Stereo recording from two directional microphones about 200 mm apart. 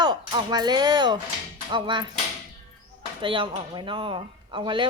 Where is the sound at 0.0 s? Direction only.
20° right (ahead or behind).